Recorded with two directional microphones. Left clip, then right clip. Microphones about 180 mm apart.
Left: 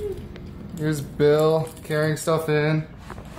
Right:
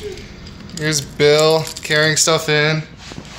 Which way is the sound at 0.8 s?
10° left (ahead or behind).